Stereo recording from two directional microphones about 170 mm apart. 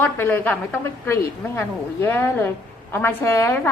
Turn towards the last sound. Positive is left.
turn(degrees=15)  # may be behind; listen again after turning